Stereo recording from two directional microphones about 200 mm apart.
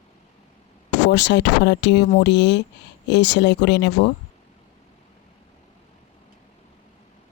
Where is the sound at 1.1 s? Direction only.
60° left (ahead or behind).